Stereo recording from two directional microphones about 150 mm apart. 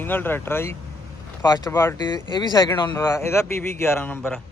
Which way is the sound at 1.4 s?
25° left (ahead or behind).